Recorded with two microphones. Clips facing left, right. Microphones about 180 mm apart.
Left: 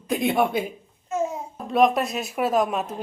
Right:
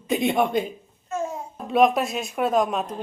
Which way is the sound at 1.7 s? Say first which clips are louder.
Right 1 dB; centre (ahead or behind).